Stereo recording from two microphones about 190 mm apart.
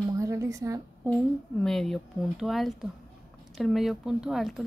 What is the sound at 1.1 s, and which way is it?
A woman's voice, 5° left (ahead or behind).